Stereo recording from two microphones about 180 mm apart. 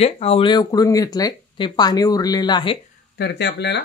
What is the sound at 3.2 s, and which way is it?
Speech, 70° left (ahead or behind).